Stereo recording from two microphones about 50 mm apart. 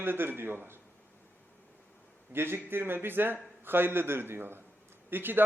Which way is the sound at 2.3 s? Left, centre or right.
Right.